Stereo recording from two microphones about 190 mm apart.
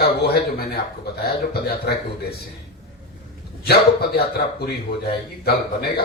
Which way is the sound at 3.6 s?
55° left (ahead or behind).